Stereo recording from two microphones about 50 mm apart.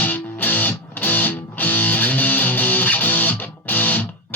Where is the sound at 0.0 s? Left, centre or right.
Left.